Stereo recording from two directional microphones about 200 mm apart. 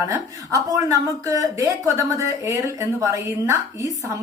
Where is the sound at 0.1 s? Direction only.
15° right (ahead or behind).